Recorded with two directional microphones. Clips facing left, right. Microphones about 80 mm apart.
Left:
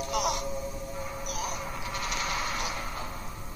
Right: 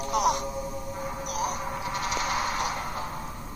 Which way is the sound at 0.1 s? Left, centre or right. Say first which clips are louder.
Right 6 dB; right.